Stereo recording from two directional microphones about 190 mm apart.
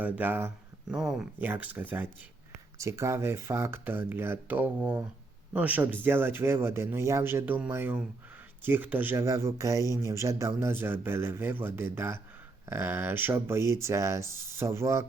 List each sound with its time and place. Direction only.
0.0 s speech: 10° right (ahead or behind)